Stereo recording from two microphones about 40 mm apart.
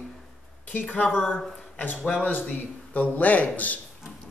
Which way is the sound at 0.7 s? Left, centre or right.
Left.